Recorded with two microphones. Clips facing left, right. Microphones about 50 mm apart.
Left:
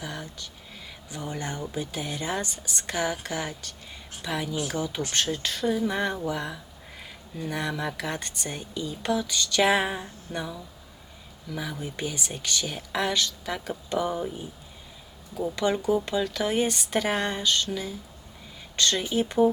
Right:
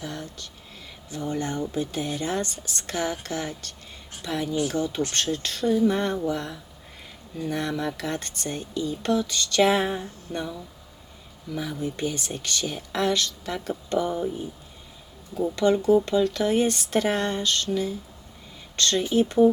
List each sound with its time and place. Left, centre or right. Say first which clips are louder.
0.0 s a sound: right 1 dB; centre
1.1 s speech: right 5 dB; centre
4.4 s speech: right 4 dB; centre
11.5 s speech: right 4 dB; centre
15.5 s speech: right 5 dB; centre